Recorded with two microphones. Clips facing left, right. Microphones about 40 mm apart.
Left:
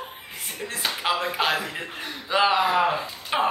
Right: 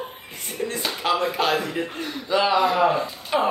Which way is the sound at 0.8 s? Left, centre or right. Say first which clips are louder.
Right 1 dB; centre.